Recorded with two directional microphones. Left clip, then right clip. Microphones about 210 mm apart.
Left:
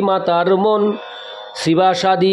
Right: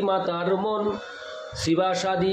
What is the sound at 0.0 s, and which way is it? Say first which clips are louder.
A man's voice: left 9 dB; 50° left (ahead or behind).